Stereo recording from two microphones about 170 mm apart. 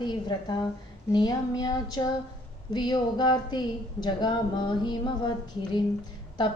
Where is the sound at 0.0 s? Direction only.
25° left (ahead or behind).